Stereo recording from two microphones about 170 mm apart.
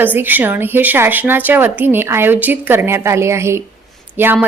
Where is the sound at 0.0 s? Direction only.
10° right (ahead or behind).